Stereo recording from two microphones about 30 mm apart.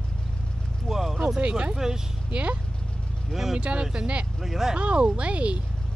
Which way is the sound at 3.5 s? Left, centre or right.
Right.